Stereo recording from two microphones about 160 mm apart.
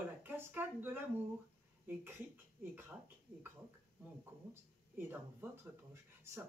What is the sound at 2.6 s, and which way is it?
Speech, 15° right (ahead or behind).